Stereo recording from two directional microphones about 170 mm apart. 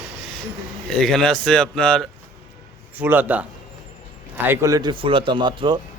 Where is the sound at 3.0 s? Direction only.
10° right (ahead or behind); by 5.8 s 25° right (ahead or behind).